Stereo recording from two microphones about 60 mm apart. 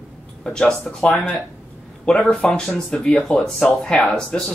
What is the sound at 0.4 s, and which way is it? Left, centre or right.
Speech, centre.